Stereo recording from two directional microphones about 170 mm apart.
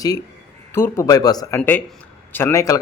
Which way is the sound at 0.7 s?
15° left (ahead or behind).